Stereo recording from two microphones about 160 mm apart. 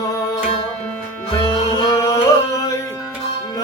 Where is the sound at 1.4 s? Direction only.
25° left (ahead or behind).